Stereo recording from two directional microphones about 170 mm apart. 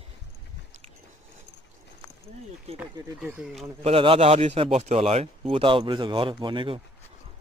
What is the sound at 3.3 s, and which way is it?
Speech, 5° right (ahead or behind).